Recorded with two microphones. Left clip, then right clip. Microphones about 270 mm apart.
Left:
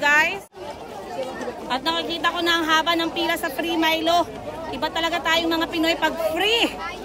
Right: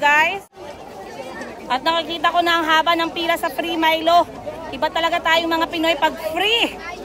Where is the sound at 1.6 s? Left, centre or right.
Centre.